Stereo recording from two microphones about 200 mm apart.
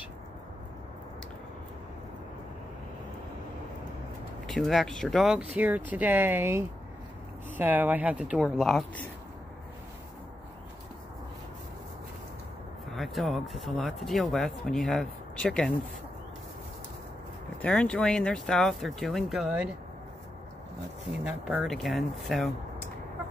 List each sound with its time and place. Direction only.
4.5 s speech: centre (ahead or behind)
12.9 s speech: centre (ahead or behind)
17.6 s speech: 5° left (ahead or behind)
21.2 s speech: 5° right (ahead or behind)